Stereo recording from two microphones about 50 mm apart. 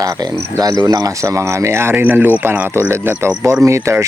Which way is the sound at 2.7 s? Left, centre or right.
Right.